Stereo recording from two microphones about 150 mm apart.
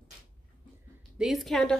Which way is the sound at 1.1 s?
Centre (ahead or behind).